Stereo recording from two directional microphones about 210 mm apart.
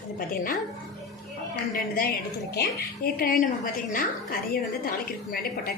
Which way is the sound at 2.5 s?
50° left (ahead or behind).